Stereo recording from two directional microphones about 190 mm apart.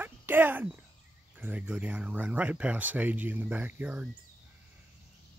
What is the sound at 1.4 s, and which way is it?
Speech, 10° right (ahead or behind).